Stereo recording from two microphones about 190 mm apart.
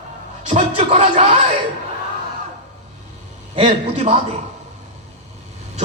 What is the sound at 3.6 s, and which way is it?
Speech, 35° right (ahead or behind).